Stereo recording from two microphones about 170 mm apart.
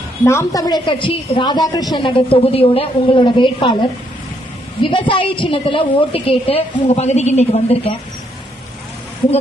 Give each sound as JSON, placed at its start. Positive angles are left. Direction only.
{"t": 0.3, "sound": "a woman's voice", "side_deg": 20}